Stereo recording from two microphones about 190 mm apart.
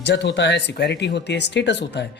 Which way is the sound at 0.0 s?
65° left (ahead or behind).